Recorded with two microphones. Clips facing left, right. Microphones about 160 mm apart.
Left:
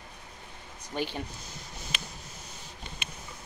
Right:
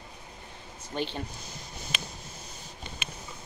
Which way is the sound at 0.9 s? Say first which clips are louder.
Even; 10° left (ahead or behind).